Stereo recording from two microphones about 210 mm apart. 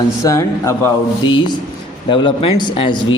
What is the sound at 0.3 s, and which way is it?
Speech, 15° left (ahead or behind).